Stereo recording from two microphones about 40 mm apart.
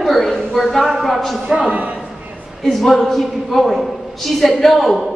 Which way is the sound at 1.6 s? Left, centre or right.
Right.